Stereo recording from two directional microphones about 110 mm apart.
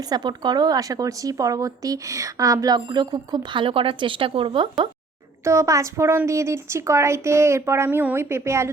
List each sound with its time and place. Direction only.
0.0 s speech: 40° right (ahead or behind)
5.4 s a woman's voice: 25° right (ahead or behind)